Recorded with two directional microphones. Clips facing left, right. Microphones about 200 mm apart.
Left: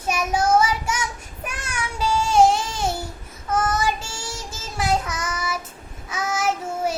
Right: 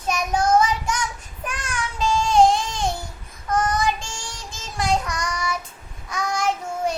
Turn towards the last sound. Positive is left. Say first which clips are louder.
# even
turn(degrees=5)  # may be behind; listen again after turning